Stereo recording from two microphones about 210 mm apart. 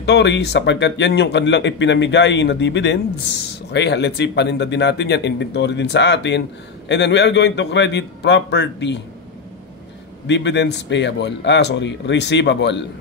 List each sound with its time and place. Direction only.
0.0 s speech: 55° left (ahead or behind)
10.2 s speech: 55° left (ahead or behind)